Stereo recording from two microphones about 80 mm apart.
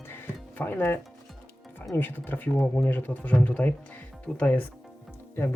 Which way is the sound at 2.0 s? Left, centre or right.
Left.